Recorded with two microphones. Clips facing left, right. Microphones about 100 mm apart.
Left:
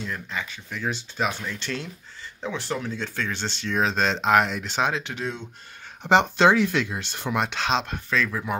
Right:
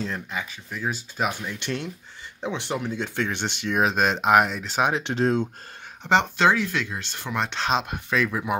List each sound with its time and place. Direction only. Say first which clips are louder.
0.3 s speech: even; 10° right (ahead or behind)
4.8 s speech: right 3 dB; 20° right (ahead or behind)
5.1 s speech: right 9 dB; 40° right (ahead or behind)
6.0 s speech: left 2 dB; 20° left (ahead or behind); by 8.5 s 10° right (ahead or behind)